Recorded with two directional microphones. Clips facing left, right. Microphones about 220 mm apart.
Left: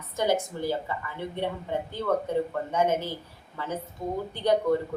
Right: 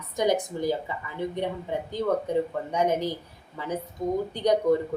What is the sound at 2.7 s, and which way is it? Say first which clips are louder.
Speech: right 1 dB; 15° right (ahead or behind).